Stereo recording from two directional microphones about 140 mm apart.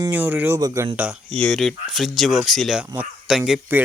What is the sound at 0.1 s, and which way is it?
Speech, 15° right (ahead or behind).